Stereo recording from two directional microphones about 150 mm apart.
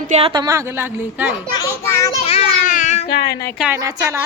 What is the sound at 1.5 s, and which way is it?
Children playing, 20° left (ahead or behind).